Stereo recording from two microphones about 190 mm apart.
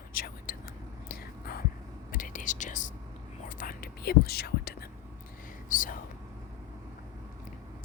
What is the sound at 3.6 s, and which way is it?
Whispering, 50° left (ahead or behind).